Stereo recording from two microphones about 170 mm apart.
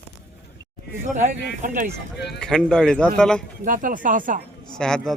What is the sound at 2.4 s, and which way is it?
A man's voice, 5° left (ahead or behind).